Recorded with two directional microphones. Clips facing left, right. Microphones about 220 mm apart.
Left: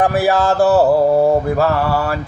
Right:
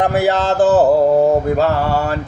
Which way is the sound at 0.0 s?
20° right (ahead or behind).